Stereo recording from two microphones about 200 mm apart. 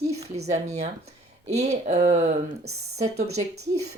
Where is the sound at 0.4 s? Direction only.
35° right (ahead or behind).